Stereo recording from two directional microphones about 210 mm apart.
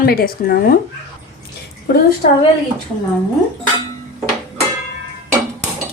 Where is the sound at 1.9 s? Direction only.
50° left (ahead or behind).